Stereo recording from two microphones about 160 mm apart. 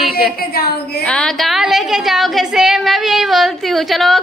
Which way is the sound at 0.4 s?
70° left (ahead or behind).